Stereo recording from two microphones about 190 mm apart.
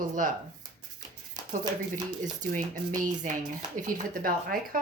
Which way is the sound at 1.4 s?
20° right (ahead or behind).